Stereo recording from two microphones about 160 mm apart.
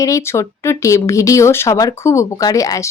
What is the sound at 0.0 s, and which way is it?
A woman's voice, 20° left (ahead or behind).